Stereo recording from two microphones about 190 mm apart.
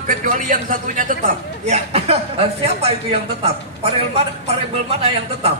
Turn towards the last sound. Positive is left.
turn(degrees=-30)  # may be behind; listen again after turning